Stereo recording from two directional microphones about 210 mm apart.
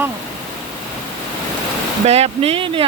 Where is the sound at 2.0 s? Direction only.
30° right (ahead or behind).